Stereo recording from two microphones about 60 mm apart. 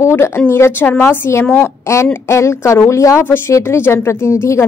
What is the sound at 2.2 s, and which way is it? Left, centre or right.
Speech, left.